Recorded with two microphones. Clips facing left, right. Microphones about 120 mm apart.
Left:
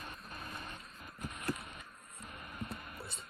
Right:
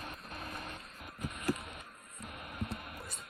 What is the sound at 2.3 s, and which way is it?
Music, 60° right (ahead or behind).